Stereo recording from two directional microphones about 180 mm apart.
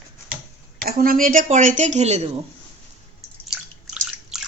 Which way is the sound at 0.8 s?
55° right (ahead or behind).